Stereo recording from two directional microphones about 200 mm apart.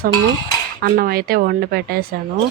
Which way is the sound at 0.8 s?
50° right (ahead or behind).